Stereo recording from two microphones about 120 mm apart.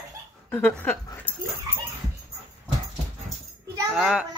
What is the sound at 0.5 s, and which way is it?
Speech, 20° left (ahead or behind).